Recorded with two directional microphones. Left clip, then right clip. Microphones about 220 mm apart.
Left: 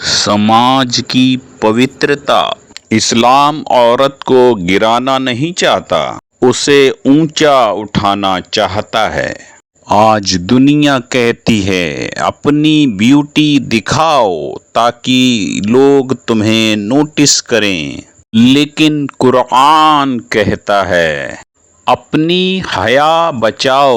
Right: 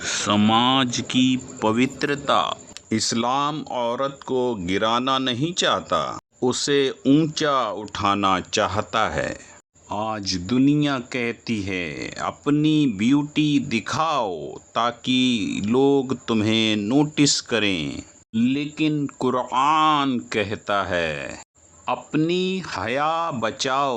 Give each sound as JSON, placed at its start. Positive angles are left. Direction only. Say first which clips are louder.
{"t": 0.3, "sound": "speech", "louder": "left 9 dB", "side_deg": 10}
{"t": 1.3, "sound": "speech", "louder": "left 10 dB", "side_deg": 25}
{"t": 7.0, "sound": "speech", "louder": "left 9 dB", "side_deg": 20}
{"t": 7.3, "sound": "speech", "louder": "left 14 dB", "side_deg": 35}
{"t": 9.9, "sound": "speech", "louder": "left 18 dB", "side_deg": 40}
{"t": 16.8, "sound": "speech", "louder": "left 9 dB", "side_deg": 20}